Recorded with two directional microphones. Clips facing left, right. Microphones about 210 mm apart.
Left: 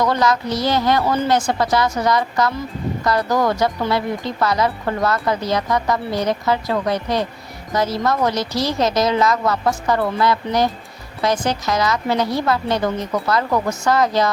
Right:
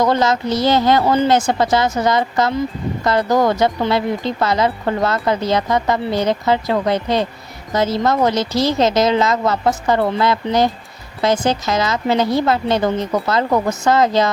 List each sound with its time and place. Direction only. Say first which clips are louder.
0.0 s speech: right 2 dB; 25° right (ahead or behind)